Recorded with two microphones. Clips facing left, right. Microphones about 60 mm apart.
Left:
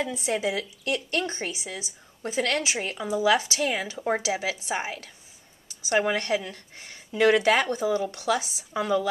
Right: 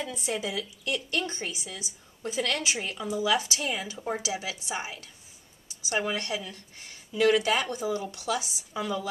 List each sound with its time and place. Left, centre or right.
0.1 s a woman's voice: left